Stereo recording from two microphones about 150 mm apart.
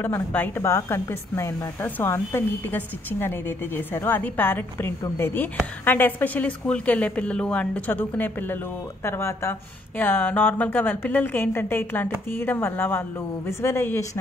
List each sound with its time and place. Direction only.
0.0 s speech: 10° left (ahead or behind)